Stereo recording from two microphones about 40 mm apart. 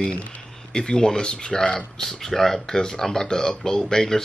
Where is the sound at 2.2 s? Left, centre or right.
Centre.